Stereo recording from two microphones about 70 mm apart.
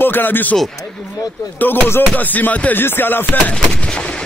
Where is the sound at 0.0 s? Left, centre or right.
Left.